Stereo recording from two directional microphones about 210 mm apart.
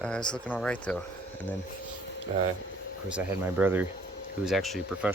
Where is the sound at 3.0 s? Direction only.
5° right (ahead or behind).